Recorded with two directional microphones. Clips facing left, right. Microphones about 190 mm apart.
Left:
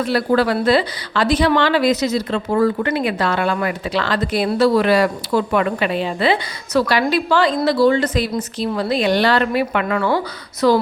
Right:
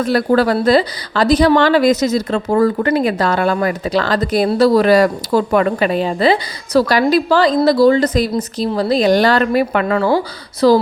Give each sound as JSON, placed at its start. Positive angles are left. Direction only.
{"t": 0.0, "sound": "a woman's voice", "side_deg": -45}